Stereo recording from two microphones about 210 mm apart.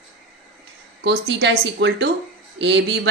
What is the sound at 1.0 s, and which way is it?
A woman's voice, 55° right (ahead or behind).